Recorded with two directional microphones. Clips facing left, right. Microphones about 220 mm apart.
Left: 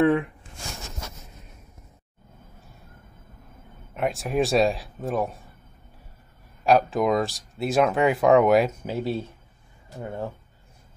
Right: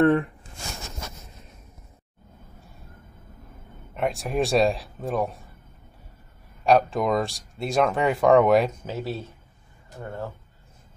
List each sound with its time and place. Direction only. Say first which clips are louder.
0.0 s speech: right 1 dB; centre (ahead or behind)
3.9 s speech: left 1 dB; centre (ahead or behind)
6.6 s speech: even; centre (ahead or behind)
8.8 s speech: left 3 dB; 15° left (ahead or behind)